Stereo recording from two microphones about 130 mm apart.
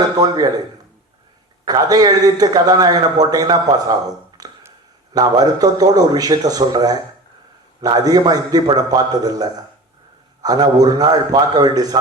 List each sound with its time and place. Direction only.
0.2 s a man's voice: 30° right (ahead or behind)
1.6 s a man's voice: 30° right (ahead or behind)
4.4 s a sound: 30° right (ahead or behind)
5.1 s a man's voice: 30° right (ahead or behind)